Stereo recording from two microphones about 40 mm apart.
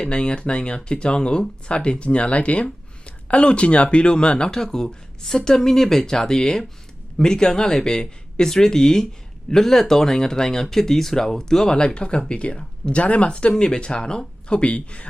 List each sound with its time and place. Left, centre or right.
0.0 s speech: left